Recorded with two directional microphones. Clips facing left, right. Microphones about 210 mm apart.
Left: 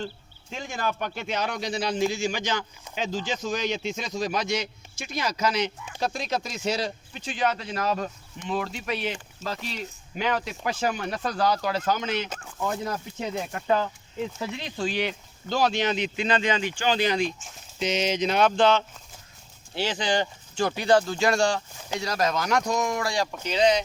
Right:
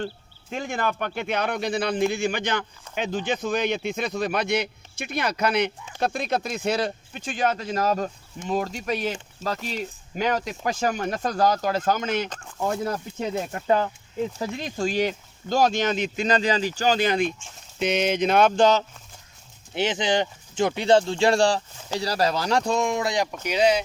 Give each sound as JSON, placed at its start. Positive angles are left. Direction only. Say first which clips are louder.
{"t": 0.5, "sound": "a man's voice", "louder": "right 3 dB", "side_deg": -55}
{"t": 10.2, "sound": "speech", "louder": "right 2 dB", "side_deg": -45}
{"t": 12.6, "sound": "speech", "louder": "right 3 dB", "side_deg": -35}
{"t": 14.3, "sound": "a man's voice", "louder": "right 3 dB", "side_deg": -45}
{"t": 19.7, "sound": "speech", "louder": "right 3 dB", "side_deg": -20}